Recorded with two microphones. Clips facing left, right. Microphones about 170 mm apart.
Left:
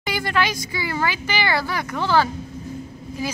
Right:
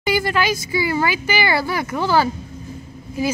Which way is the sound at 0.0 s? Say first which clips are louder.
Right 4 dB; 5° right (ahead or behind).